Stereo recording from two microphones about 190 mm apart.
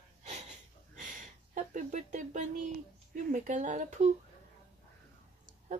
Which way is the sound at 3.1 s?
40° right (ahead or behind).